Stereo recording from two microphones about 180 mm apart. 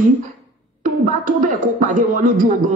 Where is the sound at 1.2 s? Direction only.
45° right (ahead or behind).